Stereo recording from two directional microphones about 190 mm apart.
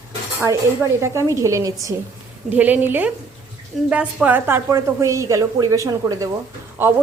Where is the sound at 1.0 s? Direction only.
15° right (ahead or behind).